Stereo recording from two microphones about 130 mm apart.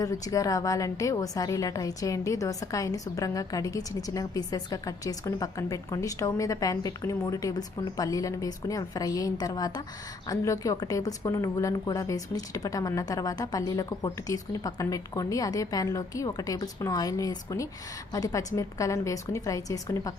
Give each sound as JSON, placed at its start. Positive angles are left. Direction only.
{"t": 0.0, "sound": "a woman's voice", "side_deg": 25}